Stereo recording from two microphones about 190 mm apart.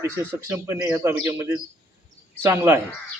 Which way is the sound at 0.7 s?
15° right (ahead or behind).